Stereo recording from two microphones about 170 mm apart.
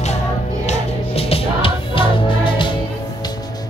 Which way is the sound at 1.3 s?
30° left (ahead or behind).